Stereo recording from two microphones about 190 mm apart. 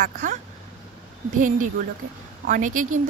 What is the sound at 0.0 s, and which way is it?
Speech, 45° right (ahead or behind).